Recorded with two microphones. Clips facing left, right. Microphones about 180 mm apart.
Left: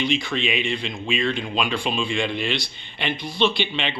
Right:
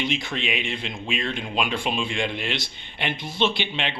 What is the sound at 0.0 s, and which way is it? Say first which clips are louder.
A man's voice: left 4 dB; 20° right (ahead or behind).